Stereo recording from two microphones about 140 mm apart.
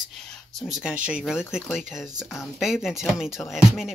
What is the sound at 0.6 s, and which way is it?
Speech, centre (ahead or behind).